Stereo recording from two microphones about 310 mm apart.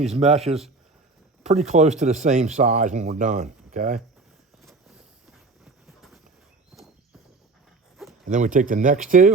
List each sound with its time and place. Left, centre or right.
0.0 s speech: right
6.7 s horse: centre
8.2 s speech: right